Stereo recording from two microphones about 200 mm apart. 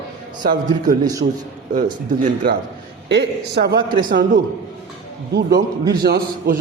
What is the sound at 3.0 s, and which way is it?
Speech, 60° right (ahead or behind).